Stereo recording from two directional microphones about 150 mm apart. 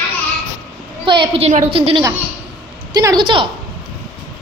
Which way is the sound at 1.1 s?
35° right (ahead or behind).